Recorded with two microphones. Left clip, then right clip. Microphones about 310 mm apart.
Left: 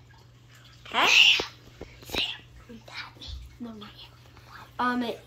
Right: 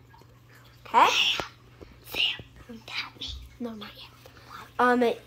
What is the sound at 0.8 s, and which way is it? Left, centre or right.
Speech, centre.